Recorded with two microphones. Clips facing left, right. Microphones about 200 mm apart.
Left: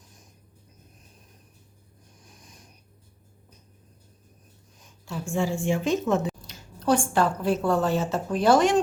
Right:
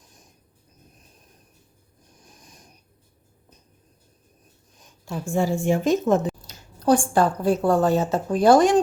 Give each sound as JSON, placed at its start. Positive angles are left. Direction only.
{"t": 5.0, "sound": "a woman's voice", "side_deg": -40}